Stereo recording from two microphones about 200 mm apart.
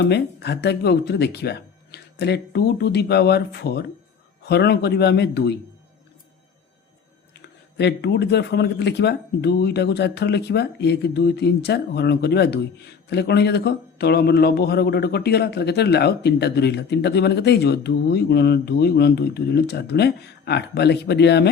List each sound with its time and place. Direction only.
0.0 s speech: 55° left (ahead or behind)
7.3 s speech: 60° left (ahead or behind)